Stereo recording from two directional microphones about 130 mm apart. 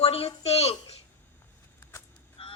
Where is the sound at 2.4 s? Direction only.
50° left (ahead or behind).